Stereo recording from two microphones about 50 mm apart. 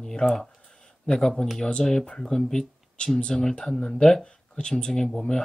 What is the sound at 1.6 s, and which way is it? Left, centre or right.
Speech, centre.